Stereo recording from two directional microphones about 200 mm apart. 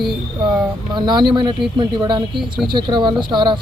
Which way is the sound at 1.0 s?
20° right (ahead or behind).